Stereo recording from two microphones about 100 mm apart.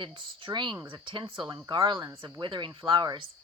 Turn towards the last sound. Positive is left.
turn(degrees=-50)  # may be behind; listen again after turning